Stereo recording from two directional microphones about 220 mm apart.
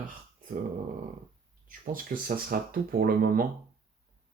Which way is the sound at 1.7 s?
40° right (ahead or behind).